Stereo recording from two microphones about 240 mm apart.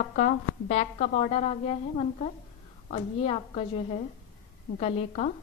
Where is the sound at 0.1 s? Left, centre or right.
Left.